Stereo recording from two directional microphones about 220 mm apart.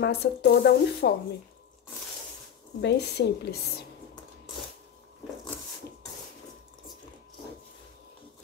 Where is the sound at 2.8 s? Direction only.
50° left (ahead or behind).